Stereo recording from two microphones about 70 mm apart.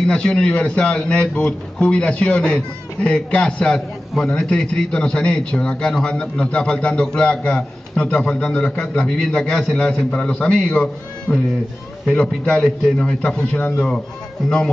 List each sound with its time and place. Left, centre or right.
0.0 s a man's voice: centre